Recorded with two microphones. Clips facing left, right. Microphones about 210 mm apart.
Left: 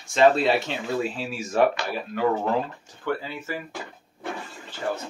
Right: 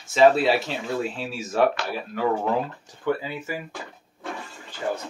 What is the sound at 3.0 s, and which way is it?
Speech, 10° right (ahead or behind).